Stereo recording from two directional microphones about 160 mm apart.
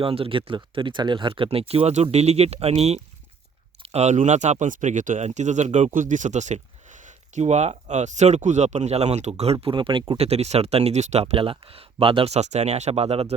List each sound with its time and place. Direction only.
0.0 s speech: 35° right (ahead or behind)